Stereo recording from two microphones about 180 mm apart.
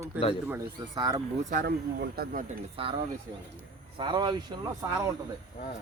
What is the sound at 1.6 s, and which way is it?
Speech, 60° right (ahead or behind).